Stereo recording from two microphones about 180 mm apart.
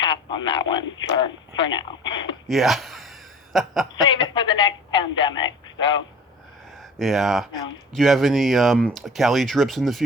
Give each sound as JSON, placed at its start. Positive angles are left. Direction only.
{"t": 0.0, "sound": "a woman's voice", "side_deg": 25}
{"t": 2.5, "sound": "gasp", "side_deg": 0}
{"t": 3.9, "sound": "a woman's voice", "side_deg": 25}
{"t": 6.7, "sound": "speech", "side_deg": 0}